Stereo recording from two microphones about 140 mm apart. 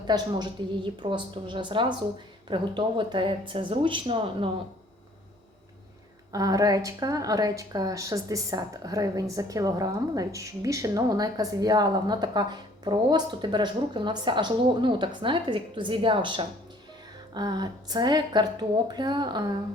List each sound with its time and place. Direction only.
0.1 s a woman's voice: 30° right (ahead or behind)
6.3 s a woman's voice: 25° right (ahead or behind)